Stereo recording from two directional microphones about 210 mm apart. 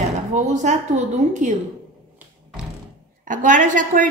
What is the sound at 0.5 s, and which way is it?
A woman's voice, 35° right (ahead or behind).